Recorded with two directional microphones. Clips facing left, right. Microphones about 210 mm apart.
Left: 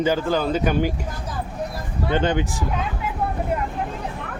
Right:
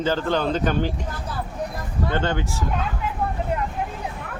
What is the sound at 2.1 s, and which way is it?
Speech, 15° left (ahead or behind).